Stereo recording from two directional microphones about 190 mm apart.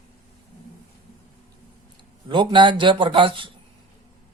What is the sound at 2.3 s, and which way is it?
A man's voice, 25° right (ahead or behind).